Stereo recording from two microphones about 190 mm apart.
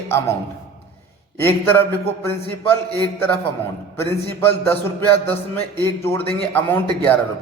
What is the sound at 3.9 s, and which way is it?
Speech, 10° left (ahead or behind).